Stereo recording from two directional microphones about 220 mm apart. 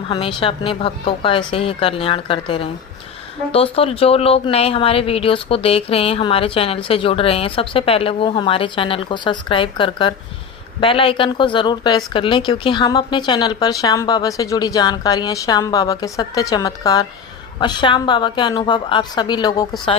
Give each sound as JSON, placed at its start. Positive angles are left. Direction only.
{"t": 0.1, "sound": "speech", "side_deg": 20}